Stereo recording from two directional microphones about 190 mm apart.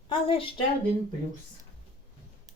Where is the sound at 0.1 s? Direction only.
30° left (ahead or behind).